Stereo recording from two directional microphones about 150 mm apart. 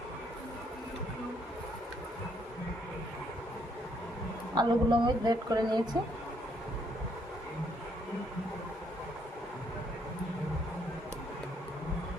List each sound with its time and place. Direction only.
4.5 s a woman's voice: 30° right (ahead or behind)